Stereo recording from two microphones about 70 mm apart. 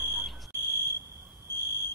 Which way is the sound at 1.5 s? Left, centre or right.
Left.